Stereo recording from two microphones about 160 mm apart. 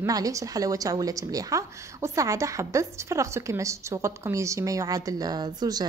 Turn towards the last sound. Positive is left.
turn(degrees=-25)  # may be behind; listen again after turning